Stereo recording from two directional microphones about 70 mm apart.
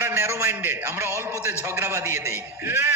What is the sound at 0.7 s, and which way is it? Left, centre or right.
A man's voice, right.